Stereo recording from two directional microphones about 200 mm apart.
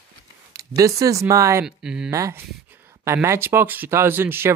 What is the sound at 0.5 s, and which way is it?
Speech, 15° right (ahead or behind).